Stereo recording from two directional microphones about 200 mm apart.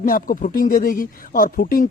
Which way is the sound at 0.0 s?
45° left (ahead or behind).